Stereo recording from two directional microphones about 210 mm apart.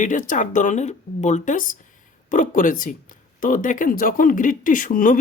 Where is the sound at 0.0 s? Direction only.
40° left (ahead or behind).